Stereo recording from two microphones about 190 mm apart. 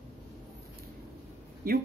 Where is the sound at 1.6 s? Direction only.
50° right (ahead or behind).